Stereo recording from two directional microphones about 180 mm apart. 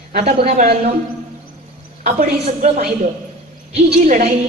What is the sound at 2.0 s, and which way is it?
Speech, 40° right (ahead or behind).